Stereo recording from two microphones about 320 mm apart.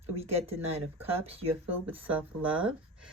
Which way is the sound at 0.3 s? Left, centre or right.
Centre.